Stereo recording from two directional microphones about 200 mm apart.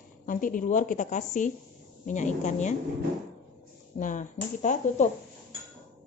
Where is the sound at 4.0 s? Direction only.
40° left (ahead or behind).